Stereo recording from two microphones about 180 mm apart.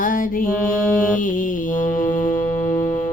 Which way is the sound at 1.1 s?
50° left (ahead or behind).